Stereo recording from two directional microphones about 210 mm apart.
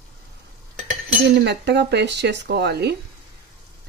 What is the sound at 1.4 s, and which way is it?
Speech, 55° right (ahead or behind).